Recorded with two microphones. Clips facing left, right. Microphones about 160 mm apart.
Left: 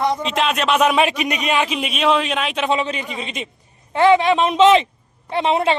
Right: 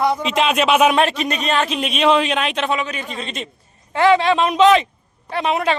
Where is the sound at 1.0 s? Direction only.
15° left (ahead or behind).